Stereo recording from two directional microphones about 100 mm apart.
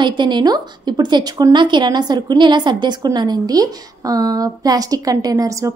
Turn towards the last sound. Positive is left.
turn(degrees=-35)  # may be behind; listen again after turning